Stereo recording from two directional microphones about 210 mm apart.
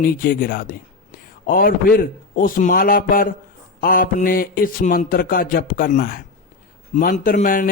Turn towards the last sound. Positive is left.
turn(degrees=40)  # may be behind; listen again after turning